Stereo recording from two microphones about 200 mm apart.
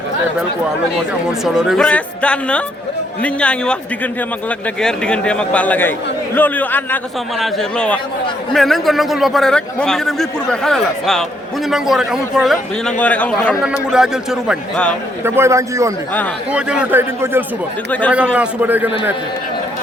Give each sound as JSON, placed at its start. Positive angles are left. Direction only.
{"t": 1.3, "sound": "a man's voice", "side_deg": 0}
{"t": 15.2, "sound": "a man's voice", "side_deg": -15}